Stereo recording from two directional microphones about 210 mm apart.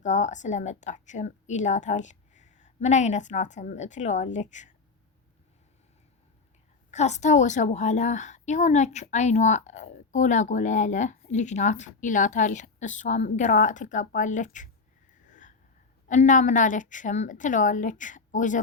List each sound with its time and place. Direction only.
0.0 s a woman's voice: 35° left (ahead or behind)
6.9 s a woman's voice: 35° left (ahead or behind)
15.3 s a sound: 35° left (ahead or behind)
16.0 s a woman's voice: 35° left (ahead or behind)